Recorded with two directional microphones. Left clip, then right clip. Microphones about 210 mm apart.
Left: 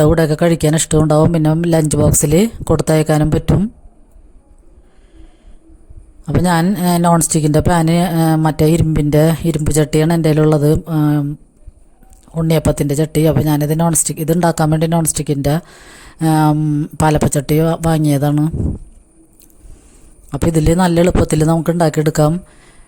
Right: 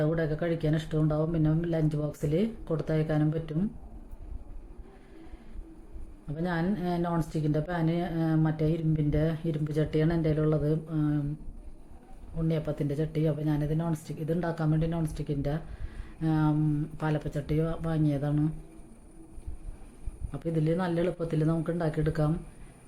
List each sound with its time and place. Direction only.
0.0 s speech: 50° left (ahead or behind)
6.2 s speech: 50° left (ahead or behind)
12.4 s speech: 50° left (ahead or behind)
20.3 s speech: 50° left (ahead or behind)